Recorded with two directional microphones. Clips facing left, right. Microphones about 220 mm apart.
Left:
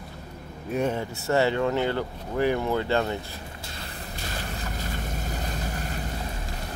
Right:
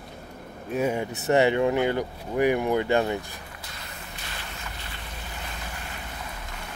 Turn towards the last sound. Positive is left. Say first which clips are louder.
# left 6 dB
turn(degrees=40)  # may be behind; listen again after turning